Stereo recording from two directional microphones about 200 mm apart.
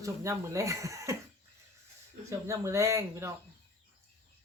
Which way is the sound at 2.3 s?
15° right (ahead or behind).